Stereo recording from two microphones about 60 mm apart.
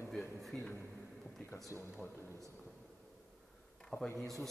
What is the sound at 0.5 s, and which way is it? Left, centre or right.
Speech, centre.